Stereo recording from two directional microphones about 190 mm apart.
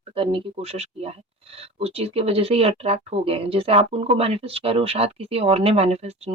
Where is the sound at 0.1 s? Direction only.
30° right (ahead or behind).